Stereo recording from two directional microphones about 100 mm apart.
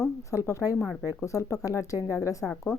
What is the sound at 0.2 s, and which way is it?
Speech, 30° left (ahead or behind).